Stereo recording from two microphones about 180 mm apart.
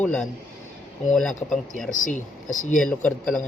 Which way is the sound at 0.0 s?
5° left (ahead or behind).